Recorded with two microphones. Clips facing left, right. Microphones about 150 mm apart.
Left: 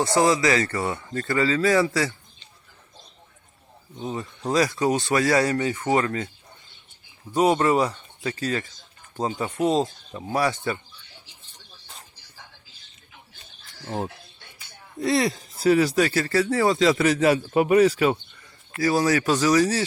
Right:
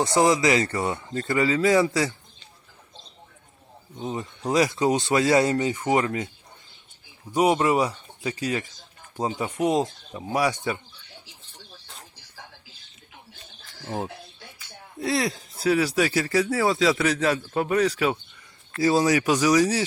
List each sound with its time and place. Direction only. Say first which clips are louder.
0.0 s speech: even; 20° right (ahead or behind)
4.0 s speech: even; 20° right (ahead or behind)
7.3 s speech: left 1 dB; 10° right (ahead or behind)
13.8 s speech: left 1 dB; centre (ahead or behind)
18.8 s speech: right 1 dB; 20° right (ahead or behind)